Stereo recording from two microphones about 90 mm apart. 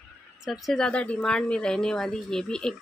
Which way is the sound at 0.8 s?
15° left (ahead or behind).